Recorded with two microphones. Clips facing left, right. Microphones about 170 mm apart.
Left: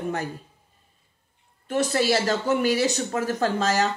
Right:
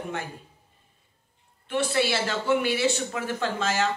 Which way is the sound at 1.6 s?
40° left (ahead or behind).